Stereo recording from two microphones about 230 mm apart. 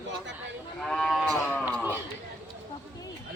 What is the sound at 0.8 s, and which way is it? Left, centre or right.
Livestock, centre.